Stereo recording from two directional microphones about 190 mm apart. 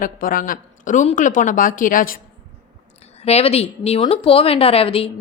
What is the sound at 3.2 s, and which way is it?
Speech, 35° left (ahead or behind).